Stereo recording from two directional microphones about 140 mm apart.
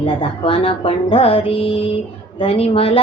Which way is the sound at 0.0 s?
40° left (ahead or behind).